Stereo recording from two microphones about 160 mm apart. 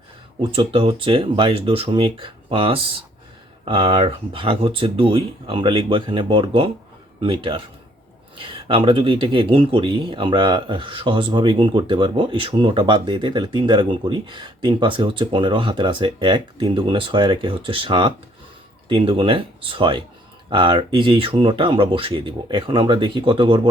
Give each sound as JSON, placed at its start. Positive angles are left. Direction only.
{"t": 0.5, "sound": "speech", "side_deg": -35}